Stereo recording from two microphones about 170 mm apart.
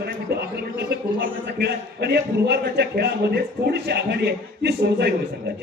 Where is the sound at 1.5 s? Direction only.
75° right (ahead or behind).